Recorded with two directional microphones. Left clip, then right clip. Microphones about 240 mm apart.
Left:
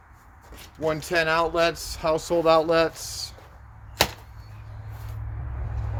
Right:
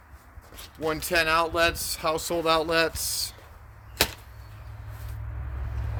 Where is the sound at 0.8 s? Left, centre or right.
Right.